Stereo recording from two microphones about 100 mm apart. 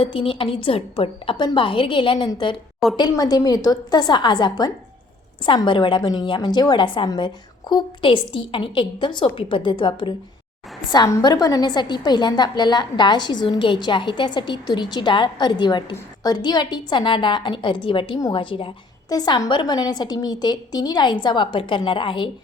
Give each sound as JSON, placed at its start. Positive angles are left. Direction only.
{"t": 0.0, "sound": "a woman's voice", "side_deg": 60}
{"t": 3.1, "sound": "a woman's voice", "side_deg": 40}
{"t": 10.9, "sound": "a woman's voice", "side_deg": 40}
{"t": 19.0, "sound": "a woman's voice", "side_deg": 40}